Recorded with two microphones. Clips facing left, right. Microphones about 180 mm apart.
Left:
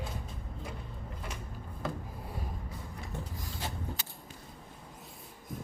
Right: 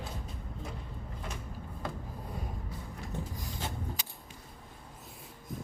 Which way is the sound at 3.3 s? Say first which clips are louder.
Right 1 dB; 15° right (ahead or behind).